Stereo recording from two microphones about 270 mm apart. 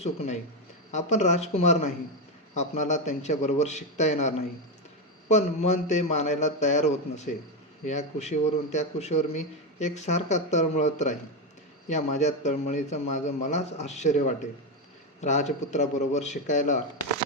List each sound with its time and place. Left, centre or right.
0.9 s a man's voice: left